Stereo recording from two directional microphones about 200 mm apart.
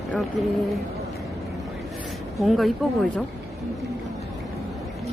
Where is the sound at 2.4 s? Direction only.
Centre (ahead or behind).